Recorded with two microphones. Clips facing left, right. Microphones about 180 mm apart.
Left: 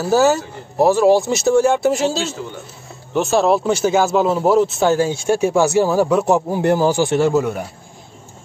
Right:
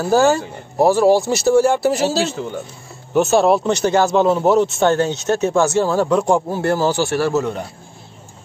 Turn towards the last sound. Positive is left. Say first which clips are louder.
# left 2 dB
turn(degrees=10)  # may be behind; listen again after turning